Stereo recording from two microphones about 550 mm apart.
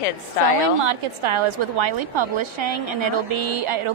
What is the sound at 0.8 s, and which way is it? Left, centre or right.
A woman's voice, right.